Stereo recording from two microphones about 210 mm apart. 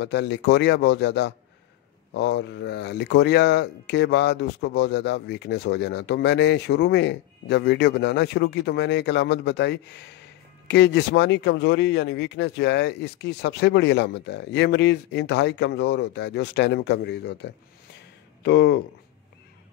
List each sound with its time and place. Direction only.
0.0 s speech: 55° left (ahead or behind)